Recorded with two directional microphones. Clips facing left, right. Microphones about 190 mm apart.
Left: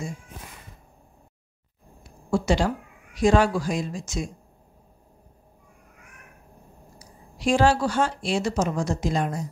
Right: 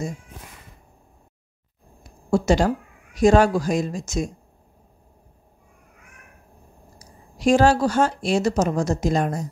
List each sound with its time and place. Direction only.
2.3 s speech: 45° right (ahead or behind)
7.0 s speech: 45° right (ahead or behind)